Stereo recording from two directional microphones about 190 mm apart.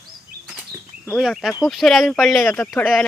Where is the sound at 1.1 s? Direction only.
Centre (ahead or behind).